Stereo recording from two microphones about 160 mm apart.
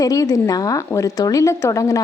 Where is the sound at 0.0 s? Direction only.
20° left (ahead or behind).